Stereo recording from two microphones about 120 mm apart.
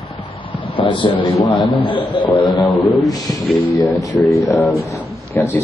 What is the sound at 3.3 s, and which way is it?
A man's voice, 25° left (ahead or behind).